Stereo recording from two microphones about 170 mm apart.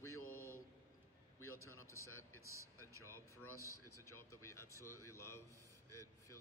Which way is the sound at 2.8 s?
15° right (ahead or behind).